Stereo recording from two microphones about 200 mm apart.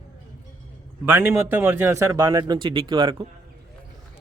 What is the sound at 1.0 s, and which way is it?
Speech, 10° right (ahead or behind).